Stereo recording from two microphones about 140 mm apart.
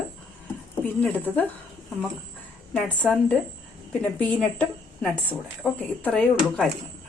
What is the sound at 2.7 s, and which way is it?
A woman's voice, 10° left (ahead or behind).